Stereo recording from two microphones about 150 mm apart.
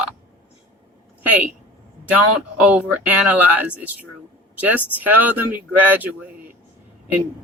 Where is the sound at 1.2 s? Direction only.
10° right (ahead or behind).